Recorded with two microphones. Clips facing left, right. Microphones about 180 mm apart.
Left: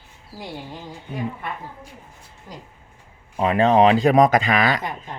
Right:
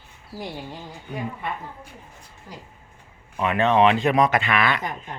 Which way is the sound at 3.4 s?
30° left (ahead or behind).